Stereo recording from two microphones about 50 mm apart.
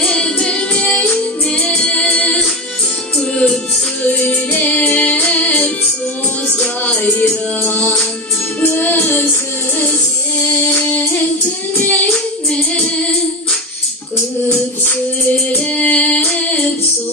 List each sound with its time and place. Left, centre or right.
0.0 s music: centre
4.0 s music: left
6.8 s music: left
10.4 s music: left
11.7 s singing: left
12.7 s music: left
15.5 s music: left
16.3 s female singing: left